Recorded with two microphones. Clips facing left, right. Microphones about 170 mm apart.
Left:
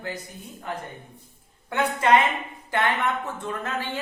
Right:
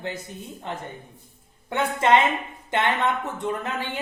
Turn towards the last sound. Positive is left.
turn(degrees=-15)  # may be behind; listen again after turning